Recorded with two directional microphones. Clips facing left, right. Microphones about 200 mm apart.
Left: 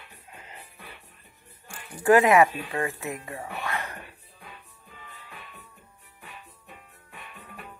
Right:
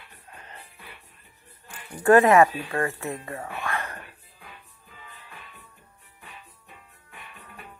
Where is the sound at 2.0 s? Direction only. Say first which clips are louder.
Right 2 dB; 20° left (ahead or behind).